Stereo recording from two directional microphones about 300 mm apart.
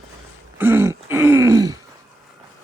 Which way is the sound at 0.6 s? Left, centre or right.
Centre.